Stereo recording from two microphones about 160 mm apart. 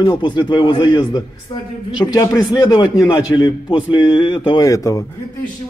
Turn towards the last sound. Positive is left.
turn(degrees=20)  # may be behind; listen again after turning